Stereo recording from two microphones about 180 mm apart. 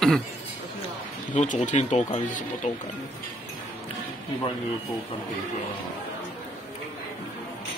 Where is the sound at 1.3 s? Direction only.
45° left (ahead or behind).